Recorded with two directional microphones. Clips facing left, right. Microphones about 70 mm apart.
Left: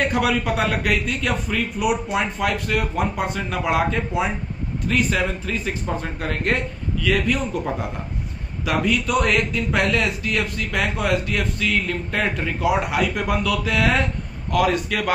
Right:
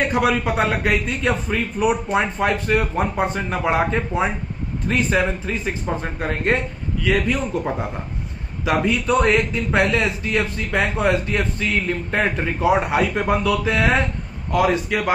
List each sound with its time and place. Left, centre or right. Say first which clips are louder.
0.1 s a man's voice: right 2 dB; right